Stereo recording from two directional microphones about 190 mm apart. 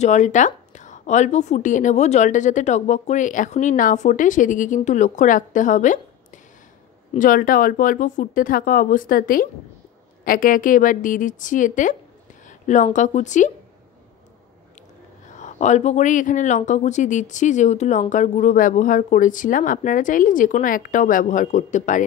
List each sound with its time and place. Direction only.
0.0 s a woman's voice: 40° left (ahead or behind)
15.3 s speech: 40° left (ahead or behind)